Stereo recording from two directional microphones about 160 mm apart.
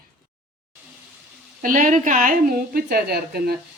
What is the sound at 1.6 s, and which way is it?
A woman's voice, 55° right (ahead or behind).